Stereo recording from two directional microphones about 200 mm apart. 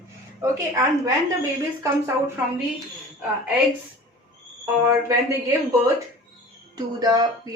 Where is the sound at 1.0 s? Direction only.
15° right (ahead or behind).